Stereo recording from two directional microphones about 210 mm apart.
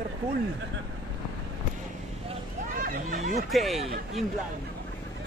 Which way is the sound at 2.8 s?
40° right (ahead or behind).